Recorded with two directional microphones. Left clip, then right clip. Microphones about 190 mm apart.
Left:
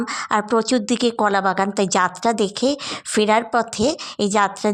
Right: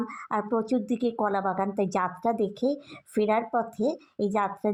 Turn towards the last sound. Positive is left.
turn(degrees=20)  # may be behind; listen again after turning